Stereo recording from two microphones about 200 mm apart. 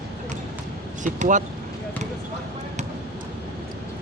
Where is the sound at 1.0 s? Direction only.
40° right (ahead or behind).